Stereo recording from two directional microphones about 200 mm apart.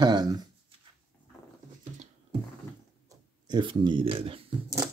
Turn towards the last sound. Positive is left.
turn(degrees=-30)  # may be behind; listen again after turning